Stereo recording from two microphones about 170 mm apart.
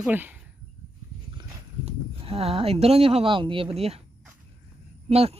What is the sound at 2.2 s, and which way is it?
Speech, 35° right (ahead or behind).